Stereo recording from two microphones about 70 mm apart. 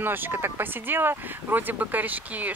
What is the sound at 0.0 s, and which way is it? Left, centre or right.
Speech, right.